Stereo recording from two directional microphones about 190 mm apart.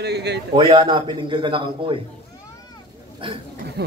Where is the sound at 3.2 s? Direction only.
25° right (ahead or behind).